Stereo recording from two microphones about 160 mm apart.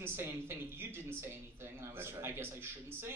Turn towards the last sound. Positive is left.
turn(degrees=-15)  # may be behind; listen again after turning